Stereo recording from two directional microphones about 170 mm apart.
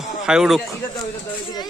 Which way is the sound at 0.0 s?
5° right (ahead or behind).